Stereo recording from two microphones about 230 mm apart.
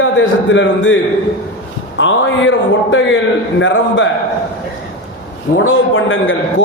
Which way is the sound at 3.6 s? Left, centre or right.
Left.